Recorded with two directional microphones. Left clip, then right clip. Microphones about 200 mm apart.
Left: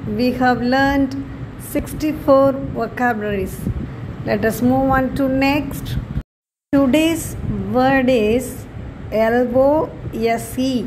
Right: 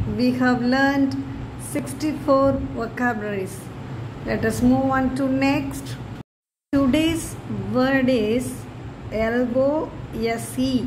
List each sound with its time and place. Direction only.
0.2 s a woman's voice: 15° left (ahead or behind)